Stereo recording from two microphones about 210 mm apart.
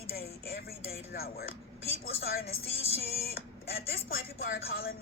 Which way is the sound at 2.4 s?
30° left (ahead or behind).